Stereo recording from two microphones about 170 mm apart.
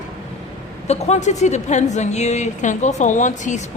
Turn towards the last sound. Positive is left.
turn(degrees=45)  # may be behind; listen again after turning